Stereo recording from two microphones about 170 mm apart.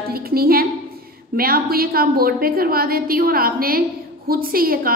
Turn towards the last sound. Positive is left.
turn(degrees=-60)  # may be behind; listen again after turning